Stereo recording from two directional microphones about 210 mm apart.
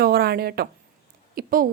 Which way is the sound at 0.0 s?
45° right (ahead or behind).